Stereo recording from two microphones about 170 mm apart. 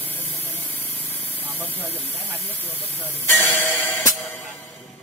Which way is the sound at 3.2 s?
15° left (ahead or behind).